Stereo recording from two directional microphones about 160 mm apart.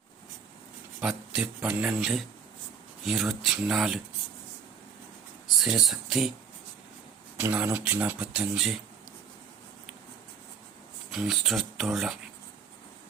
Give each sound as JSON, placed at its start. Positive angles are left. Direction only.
{"t": 1.0, "sound": "speech", "side_deg": -5}
{"t": 5.5, "sound": "speech", "side_deg": 0}
{"t": 7.3, "sound": "speech", "side_deg": -10}
{"t": 11.1, "sound": "speech", "side_deg": 0}